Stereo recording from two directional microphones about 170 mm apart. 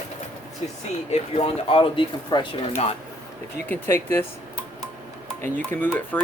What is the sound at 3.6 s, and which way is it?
Speech, 15° left (ahead or behind).